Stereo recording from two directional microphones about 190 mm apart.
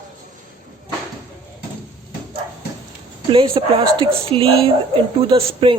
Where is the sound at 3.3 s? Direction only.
25° right (ahead or behind).